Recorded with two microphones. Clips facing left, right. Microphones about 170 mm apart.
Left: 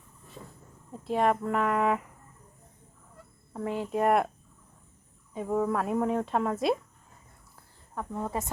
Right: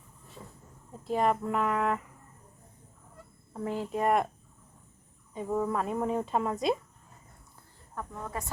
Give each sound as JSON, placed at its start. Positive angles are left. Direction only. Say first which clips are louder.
{"t": 1.0, "sound": "speech", "louder": "left 1 dB", "side_deg": 0}
{"t": 3.5, "sound": "speech", "louder": "left 2 dB", "side_deg": 0}
{"t": 5.3, "sound": "speech", "louder": "left 2 dB", "side_deg": 5}
{"t": 8.1, "sound": "a woman's voice", "louder": "left 7 dB", "side_deg": 25}